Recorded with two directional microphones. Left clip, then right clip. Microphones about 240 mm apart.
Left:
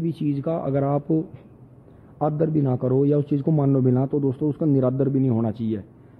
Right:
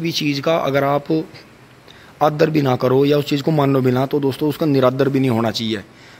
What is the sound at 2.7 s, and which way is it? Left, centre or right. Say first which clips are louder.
Speech: right 7 dB; right.